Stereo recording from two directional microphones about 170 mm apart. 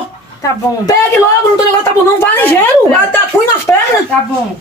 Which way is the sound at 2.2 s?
10° left (ahead or behind).